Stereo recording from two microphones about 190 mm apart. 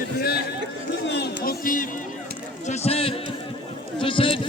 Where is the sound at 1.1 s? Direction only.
55° left (ahead or behind).